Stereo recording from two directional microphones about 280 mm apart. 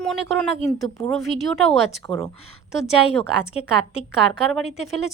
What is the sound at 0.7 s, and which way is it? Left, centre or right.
Speech, centre.